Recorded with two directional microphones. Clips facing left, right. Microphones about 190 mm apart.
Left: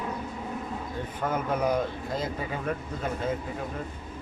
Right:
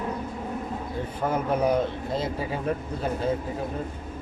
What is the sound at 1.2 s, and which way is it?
Speech, 30° right (ahead or behind).